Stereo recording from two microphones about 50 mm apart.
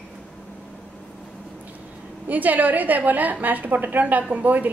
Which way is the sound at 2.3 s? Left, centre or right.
Right.